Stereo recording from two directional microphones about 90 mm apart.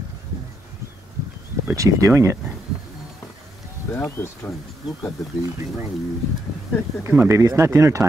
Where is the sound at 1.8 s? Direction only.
35° right (ahead or behind).